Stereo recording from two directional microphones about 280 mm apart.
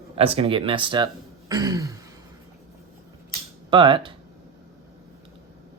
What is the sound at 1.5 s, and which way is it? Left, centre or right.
Throat clearing, centre.